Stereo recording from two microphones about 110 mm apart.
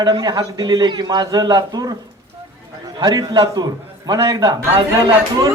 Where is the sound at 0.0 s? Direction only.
40° right (ahead or behind).